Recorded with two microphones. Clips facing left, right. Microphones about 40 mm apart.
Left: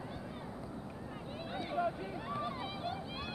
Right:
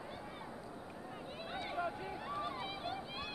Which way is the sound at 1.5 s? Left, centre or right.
Centre.